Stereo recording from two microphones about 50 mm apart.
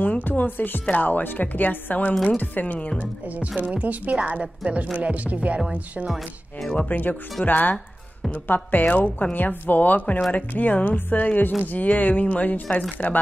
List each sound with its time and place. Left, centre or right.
0.0 s speech: left
3.7 s a woman's voice: right
6.6 s speech: centre
6.9 s speech: left
8.7 s speech: left